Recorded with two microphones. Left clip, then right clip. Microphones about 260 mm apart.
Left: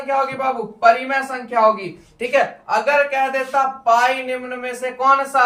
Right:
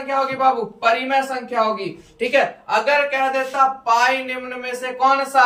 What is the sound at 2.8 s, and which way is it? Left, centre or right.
A man's voice, centre.